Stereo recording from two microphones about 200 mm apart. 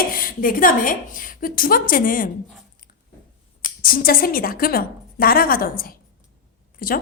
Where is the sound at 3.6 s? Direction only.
45° left (ahead or behind).